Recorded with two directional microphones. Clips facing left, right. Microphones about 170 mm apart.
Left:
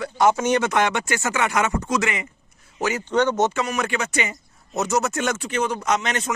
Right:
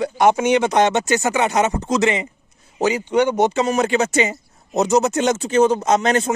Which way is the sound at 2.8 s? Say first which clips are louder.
Right 4 dB; 15° right (ahead or behind).